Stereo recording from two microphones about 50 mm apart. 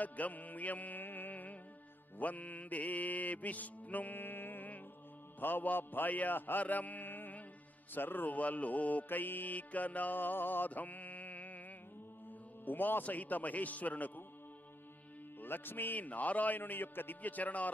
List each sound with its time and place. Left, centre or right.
0.0 s music: left
12.6 s music: left
15.4 s music: left